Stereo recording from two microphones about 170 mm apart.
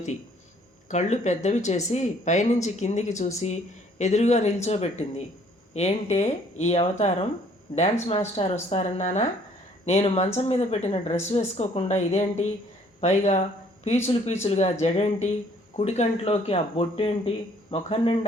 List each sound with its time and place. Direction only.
0.9 s speech: 45° left (ahead or behind)